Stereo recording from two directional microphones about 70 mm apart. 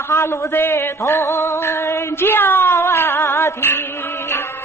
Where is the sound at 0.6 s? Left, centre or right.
Left.